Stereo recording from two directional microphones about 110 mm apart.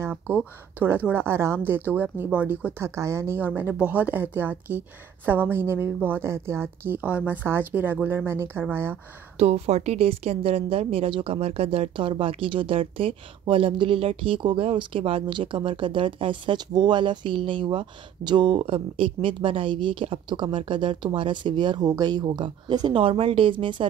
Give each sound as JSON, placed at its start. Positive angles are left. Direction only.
{"t": 0.0, "sound": "speech", "side_deg": -15}
{"t": 2.9, "sound": "speech", "side_deg": -25}
{"t": 9.4, "sound": "a woman's voice", "side_deg": -70}